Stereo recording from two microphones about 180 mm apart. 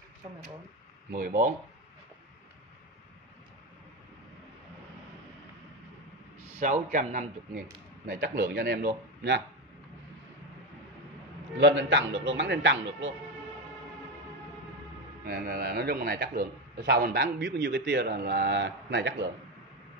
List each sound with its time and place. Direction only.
1.1 s a man's voice: 50° right (ahead or behind)
6.6 s a man's voice: 45° right (ahead or behind)
8.1 s a man's voice: 65° right (ahead or behind)
11.5 s a man's voice: 85° right
15.2 s a man's voice: 60° right (ahead or behind); by 19.3 s 75° right (ahead or behind)